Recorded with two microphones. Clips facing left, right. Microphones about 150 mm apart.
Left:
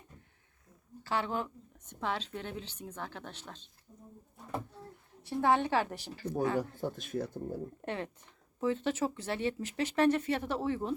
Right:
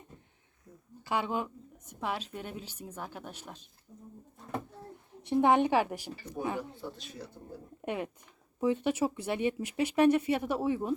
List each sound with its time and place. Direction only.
1.0 s speech: 15° right (ahead or behind)
5.2 s speech: 20° right (ahead or behind)
6.7 s speech: 45° left (ahead or behind)
7.8 s speech: 15° right (ahead or behind)